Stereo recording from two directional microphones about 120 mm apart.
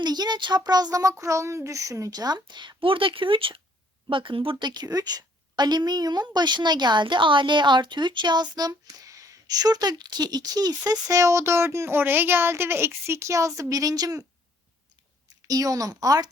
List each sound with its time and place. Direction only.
0.0 s a woman's voice: 35° right (ahead or behind)
15.4 s a woman's voice: 30° right (ahead or behind)